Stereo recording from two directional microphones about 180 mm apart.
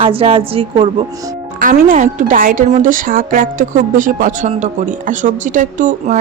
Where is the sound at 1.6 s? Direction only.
50° right (ahead or behind).